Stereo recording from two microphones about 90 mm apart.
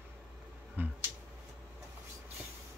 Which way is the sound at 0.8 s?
20° right (ahead or behind).